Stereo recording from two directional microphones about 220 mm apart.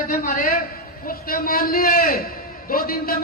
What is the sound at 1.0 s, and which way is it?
A man's voice, 40° left (ahead or behind).